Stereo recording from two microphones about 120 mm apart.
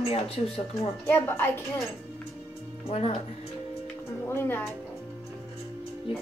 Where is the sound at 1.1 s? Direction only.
20° left (ahead or behind).